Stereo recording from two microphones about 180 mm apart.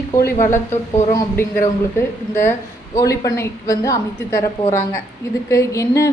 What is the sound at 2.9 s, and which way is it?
Speech, 20° left (ahead or behind).